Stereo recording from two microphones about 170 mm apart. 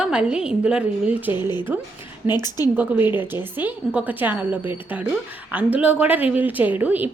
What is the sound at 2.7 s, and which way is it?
A woman's voice, 10° right (ahead or behind).